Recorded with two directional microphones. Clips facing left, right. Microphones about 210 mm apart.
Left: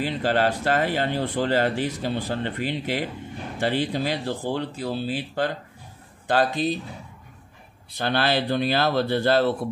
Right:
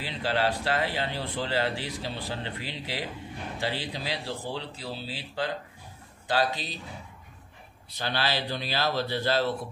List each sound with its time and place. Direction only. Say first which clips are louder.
0.0 s speech: left 6 dB; 45° left (ahead or behind)
8.0 s speech: left 7 dB; 55° left (ahead or behind)